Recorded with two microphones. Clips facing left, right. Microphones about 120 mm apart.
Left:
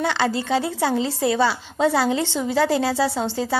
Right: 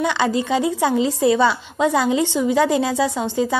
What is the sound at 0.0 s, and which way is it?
A woman's voice, 15° right (ahead or behind).